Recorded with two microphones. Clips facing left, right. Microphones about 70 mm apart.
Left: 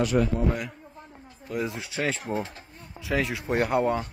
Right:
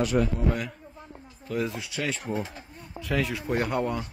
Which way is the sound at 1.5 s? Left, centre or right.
Centre.